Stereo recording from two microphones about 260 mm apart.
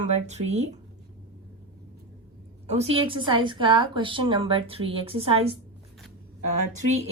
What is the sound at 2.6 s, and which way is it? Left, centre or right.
A woman's voice, right.